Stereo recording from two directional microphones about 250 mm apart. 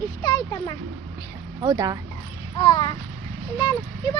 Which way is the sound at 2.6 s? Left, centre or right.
Centre.